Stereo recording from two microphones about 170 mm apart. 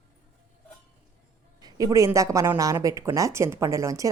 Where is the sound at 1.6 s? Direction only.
20° right (ahead or behind).